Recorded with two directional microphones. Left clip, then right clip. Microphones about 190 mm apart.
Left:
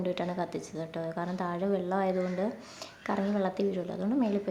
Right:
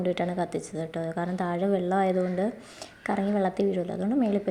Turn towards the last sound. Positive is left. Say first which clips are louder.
# right 4 dB
turn(degrees=-15)  # may be behind; listen again after turning